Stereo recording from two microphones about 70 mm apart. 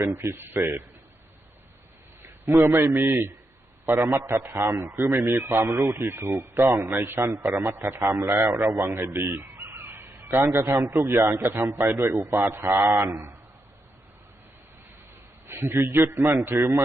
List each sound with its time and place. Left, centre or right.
0.0 s a man's voice: right
2.2 s a man's voice: right
15.4 s a man's voice: right